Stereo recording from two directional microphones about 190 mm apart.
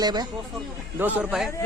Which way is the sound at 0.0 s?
20° right (ahead or behind).